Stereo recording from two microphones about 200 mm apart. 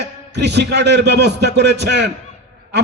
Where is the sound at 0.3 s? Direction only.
55° right (ahead or behind).